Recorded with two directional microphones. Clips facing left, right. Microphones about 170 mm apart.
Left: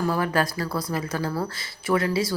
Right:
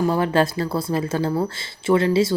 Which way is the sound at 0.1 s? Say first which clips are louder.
Right 5 dB; 25° right (ahead or behind).